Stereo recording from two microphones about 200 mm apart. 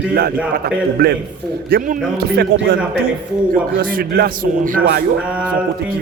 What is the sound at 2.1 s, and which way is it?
A man's voice, 55° right (ahead or behind).